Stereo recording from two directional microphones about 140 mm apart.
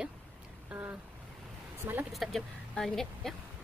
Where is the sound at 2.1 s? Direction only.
Centre (ahead or behind).